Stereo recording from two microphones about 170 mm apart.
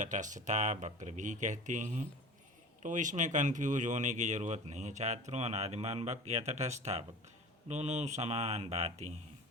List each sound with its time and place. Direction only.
0.0 s speech: 45° right (ahead or behind)